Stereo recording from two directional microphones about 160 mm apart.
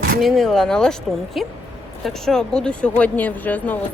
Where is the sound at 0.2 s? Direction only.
Centre (ahead or behind).